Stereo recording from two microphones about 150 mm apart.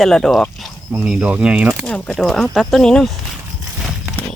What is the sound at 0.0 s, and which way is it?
Speech, centre (ahead or behind).